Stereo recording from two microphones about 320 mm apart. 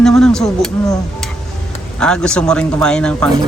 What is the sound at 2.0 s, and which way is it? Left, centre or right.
Speech, centre.